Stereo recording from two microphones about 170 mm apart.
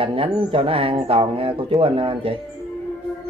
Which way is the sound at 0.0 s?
30° right (ahead or behind).